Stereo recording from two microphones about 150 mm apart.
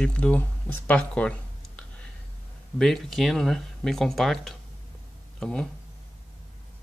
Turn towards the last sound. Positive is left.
turn(degrees=5)  # may be behind; listen again after turning